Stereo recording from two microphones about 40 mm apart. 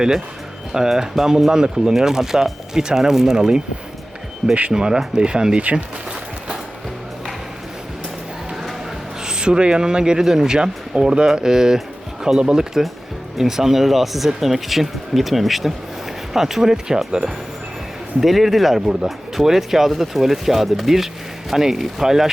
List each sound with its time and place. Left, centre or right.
0.7 s speech: centre
4.7 s speech: centre
9.2 s speech: right
18.2 s speech: centre